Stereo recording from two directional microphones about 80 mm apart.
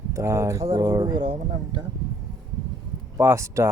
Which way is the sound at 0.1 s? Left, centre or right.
Right.